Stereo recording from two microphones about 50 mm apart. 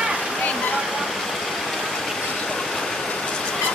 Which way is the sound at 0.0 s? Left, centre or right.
Centre.